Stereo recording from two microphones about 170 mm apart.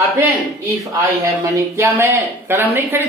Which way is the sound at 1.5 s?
15° right (ahead or behind).